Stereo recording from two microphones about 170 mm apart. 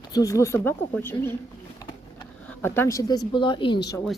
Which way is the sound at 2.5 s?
15° left (ahead or behind).